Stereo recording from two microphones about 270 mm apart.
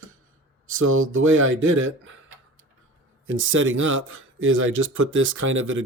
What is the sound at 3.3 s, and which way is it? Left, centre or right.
Speech, right.